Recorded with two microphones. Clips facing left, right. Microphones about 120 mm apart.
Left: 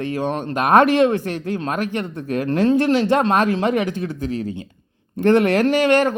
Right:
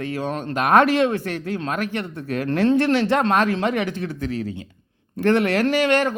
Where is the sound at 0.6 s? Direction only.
40° left (ahead or behind).